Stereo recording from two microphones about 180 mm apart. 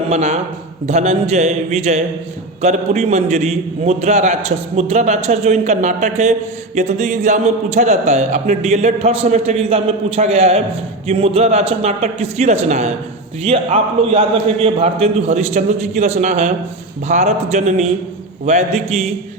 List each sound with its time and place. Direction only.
0.1 s a man's voice: 35° right (ahead or behind)